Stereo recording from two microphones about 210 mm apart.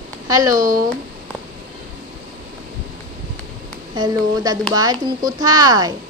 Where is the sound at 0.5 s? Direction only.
40° right (ahead or behind).